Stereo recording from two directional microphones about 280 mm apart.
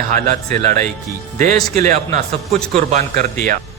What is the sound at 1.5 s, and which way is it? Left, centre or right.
Speech, centre.